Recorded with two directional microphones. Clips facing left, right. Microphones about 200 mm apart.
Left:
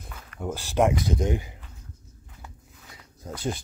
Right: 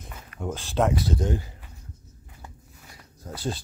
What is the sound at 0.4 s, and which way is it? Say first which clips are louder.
Speech: left 2 dB; 10° left (ahead or behind).